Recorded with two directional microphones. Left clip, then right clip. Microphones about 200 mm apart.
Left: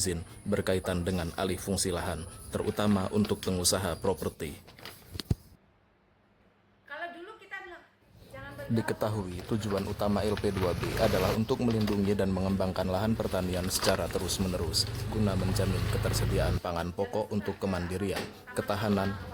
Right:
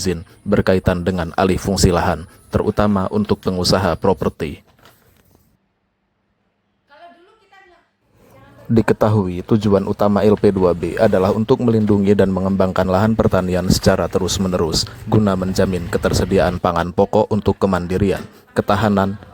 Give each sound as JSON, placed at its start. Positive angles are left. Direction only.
{"t": 0.5, "sound": "a man's voice", "side_deg": -40}
{"t": 8.7, "sound": "a man's voice", "side_deg": -45}
{"t": 12.5, "sound": "a man's voice", "side_deg": -45}